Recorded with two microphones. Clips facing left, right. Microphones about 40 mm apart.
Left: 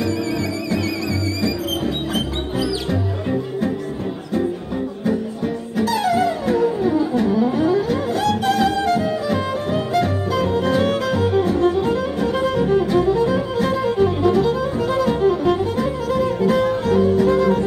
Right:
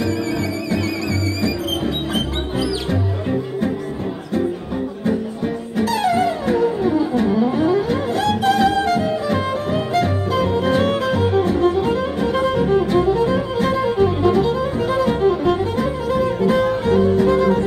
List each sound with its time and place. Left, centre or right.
5.9 s music: right
7.4 s music: right
9.0 s music: centre
11.3 s music: centre